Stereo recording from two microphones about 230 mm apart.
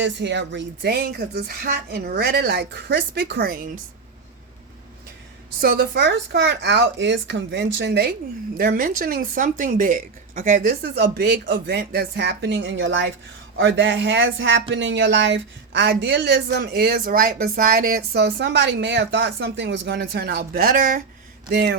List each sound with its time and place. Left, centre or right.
0.0 s speech: right
5.5 s speech: right